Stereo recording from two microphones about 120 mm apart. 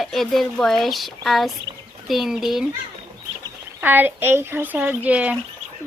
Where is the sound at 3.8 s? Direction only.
15° right (ahead or behind).